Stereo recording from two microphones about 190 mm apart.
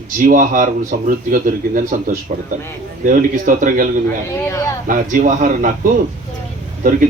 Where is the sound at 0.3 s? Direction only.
45° right (ahead or behind).